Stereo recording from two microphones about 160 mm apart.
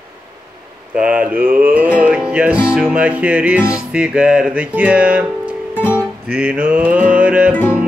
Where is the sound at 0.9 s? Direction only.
10° right (ahead or behind).